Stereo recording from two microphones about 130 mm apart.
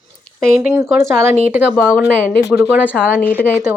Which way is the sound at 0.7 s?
20° right (ahead or behind).